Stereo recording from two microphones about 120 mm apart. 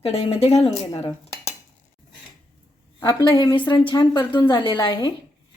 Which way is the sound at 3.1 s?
45° left (ahead or behind).